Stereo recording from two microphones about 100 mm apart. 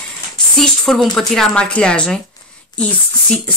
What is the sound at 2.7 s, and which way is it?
Speech, 45° left (ahead or behind).